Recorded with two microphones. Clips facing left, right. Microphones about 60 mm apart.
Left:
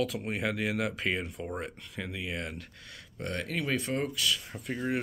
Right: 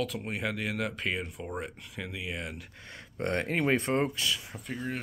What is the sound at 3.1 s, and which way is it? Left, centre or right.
Speech, right.